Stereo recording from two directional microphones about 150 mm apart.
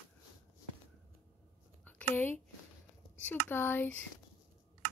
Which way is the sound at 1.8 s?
10° left (ahead or behind).